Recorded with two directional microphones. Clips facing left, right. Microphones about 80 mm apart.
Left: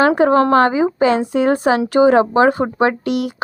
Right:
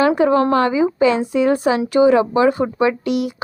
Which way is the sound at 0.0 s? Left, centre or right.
Left.